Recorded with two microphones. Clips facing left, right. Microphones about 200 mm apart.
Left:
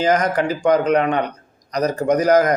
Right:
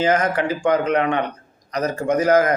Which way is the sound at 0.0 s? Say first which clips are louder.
Left 1 dB; 35° left (ahead or behind).